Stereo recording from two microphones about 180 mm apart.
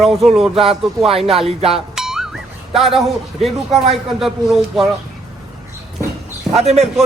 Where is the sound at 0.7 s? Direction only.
35° right (ahead or behind).